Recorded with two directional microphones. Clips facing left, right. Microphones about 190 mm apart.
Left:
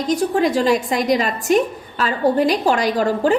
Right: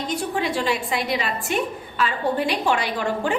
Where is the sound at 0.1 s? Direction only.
40° left (ahead or behind).